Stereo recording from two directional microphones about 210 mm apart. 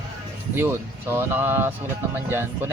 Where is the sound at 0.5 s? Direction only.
10° right (ahead or behind).